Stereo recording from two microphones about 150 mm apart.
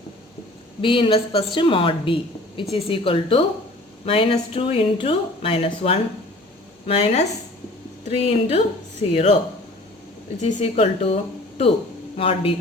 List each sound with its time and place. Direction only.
0.8 s speech: 35° left (ahead or behind)
10.4 s speech: 40° left (ahead or behind)